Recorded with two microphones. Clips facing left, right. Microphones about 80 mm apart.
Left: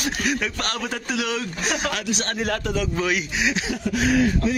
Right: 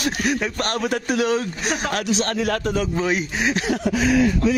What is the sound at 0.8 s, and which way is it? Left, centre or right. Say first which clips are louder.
A man's voice: right 8 dB; right.